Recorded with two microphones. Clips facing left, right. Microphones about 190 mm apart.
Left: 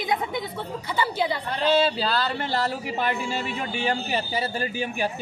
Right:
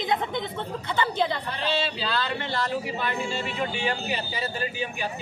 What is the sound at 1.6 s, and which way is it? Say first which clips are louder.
Speech: left 7 dB; 45° left (ahead or behind).